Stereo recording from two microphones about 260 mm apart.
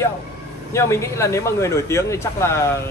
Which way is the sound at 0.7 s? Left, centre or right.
Centre.